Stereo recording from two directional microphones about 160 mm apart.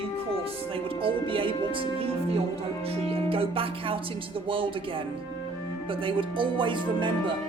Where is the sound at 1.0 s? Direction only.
35° right (ahead or behind).